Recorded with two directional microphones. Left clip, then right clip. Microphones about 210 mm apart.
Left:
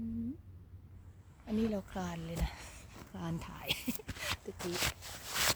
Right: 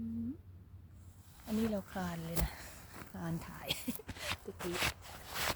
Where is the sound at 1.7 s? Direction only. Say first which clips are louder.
Even; 15° left (ahead or behind).